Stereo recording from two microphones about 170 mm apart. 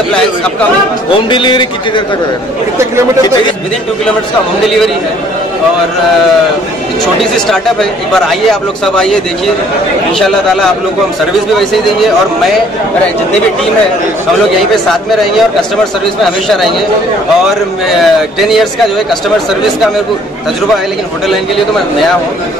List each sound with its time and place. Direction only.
1.3 s a man's voice: 25° left (ahead or behind)
8.1 s a man's voice: centre (ahead or behind)
17.9 s a man's voice: centre (ahead or behind)